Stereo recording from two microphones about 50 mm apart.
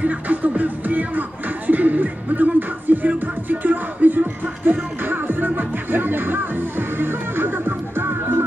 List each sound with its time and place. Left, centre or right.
0.0 s music: right